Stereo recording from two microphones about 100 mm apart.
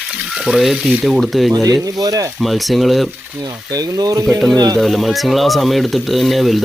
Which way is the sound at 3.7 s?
40° right (ahead or behind).